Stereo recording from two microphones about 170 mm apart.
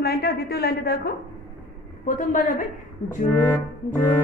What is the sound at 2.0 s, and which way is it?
Speech, 50° left (ahead or behind).